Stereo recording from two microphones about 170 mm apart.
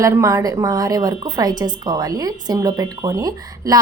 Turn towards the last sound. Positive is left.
turn(degrees=-20)  # may be behind; listen again after turning